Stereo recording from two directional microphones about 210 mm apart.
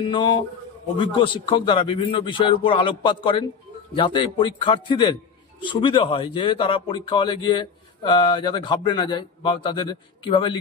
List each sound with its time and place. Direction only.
0.0 s speech: 25° left (ahead or behind)